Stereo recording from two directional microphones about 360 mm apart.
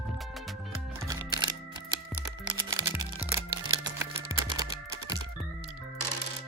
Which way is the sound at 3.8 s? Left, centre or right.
Centre.